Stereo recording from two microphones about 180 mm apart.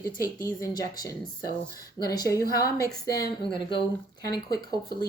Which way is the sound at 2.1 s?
20° left (ahead or behind).